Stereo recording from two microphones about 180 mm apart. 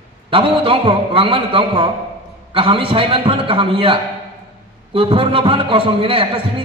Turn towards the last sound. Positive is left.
turn(degrees=-30)  # may be behind; listen again after turning